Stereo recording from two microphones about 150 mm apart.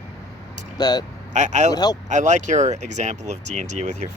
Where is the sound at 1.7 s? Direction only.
25° left (ahead or behind).